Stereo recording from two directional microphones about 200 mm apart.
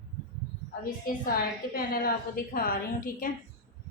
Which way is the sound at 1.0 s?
50° left (ahead or behind).